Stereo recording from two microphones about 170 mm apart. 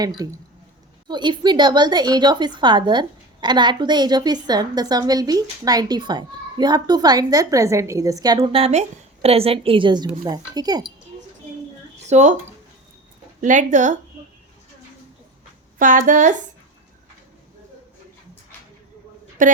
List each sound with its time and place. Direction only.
0.2 s a woman's voice: 20° right (ahead or behind)
8.5 s a woman's voice: 35° right (ahead or behind)
12.0 s speech: 40° right (ahead or behind)
13.4 s a woman's voice: 50° right (ahead or behind)
15.8 s a woman's voice: 50° right (ahead or behind)
19.4 s a woman's voice: 50° right (ahead or behind)